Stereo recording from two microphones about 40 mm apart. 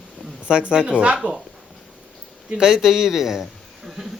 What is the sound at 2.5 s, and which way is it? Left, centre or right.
Speech, centre.